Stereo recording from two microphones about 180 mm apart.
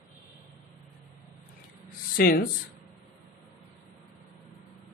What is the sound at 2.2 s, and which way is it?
Speech, 55° left (ahead or behind).